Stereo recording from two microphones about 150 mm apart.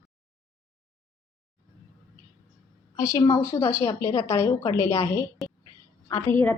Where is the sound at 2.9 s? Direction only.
20° left (ahead or behind).